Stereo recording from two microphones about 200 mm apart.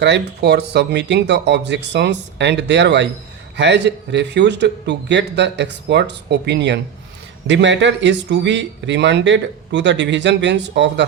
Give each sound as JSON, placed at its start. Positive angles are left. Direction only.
{"t": 0.0, "sound": "speech", "side_deg": -55}